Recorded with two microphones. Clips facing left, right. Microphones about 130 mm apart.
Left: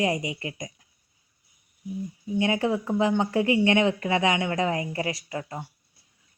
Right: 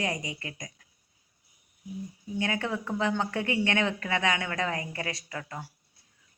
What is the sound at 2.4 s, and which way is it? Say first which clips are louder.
Speech: left 6 dB; 25° left (ahead or behind).